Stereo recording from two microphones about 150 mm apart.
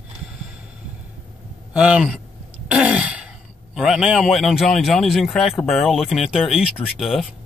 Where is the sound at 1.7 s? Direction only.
5° right (ahead or behind).